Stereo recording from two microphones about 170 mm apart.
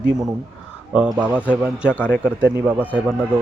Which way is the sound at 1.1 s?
5° right (ahead or behind).